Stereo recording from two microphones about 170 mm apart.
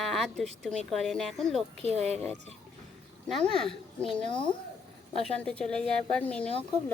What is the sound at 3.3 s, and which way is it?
Speech, 5° left (ahead or behind).